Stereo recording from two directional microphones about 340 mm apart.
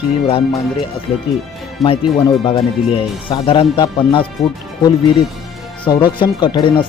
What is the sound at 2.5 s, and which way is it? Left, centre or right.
Speech, centre.